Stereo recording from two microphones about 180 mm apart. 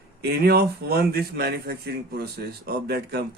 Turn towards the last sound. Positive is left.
turn(degrees=-65)  # may be behind; listen again after turning